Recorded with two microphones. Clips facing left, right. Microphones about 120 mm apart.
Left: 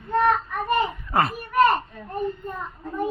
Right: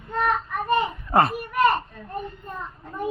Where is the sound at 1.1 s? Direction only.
30° right (ahead or behind).